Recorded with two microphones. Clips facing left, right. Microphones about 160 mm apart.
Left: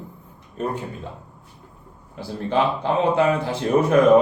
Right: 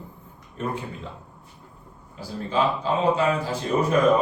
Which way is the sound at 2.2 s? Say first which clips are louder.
Left 3 dB; 65° left (ahead or behind).